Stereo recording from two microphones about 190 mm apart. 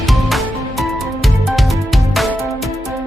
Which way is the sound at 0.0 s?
Centre (ahead or behind).